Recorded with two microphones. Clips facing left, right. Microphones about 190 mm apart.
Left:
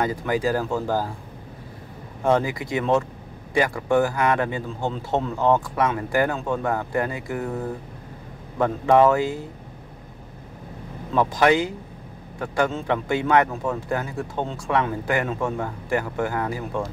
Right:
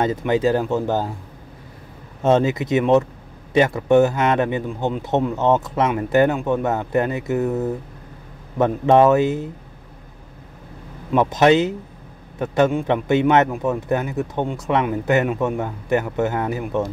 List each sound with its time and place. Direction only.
0.0 s a man's voice: 25° right (ahead or behind)
2.2 s a man's voice: 20° right (ahead or behind)
11.1 s a man's voice: 20° right (ahead or behind)